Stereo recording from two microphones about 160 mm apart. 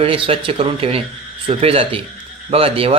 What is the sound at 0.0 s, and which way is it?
Speech, 35° right (ahead or behind).